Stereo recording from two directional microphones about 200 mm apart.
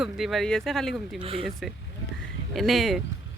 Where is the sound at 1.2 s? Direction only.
25° right (ahead or behind).